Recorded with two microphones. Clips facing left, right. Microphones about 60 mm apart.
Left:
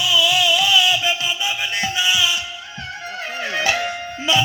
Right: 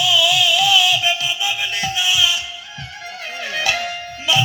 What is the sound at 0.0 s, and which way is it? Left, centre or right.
Music, left.